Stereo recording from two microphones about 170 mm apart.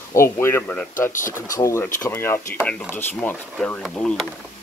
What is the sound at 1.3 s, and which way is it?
Speech, 20° left (ahead or behind).